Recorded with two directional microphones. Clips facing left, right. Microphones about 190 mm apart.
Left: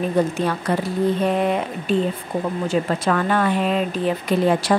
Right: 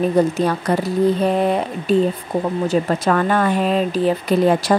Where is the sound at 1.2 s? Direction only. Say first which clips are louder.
Right 2 dB; 35° right (ahead or behind).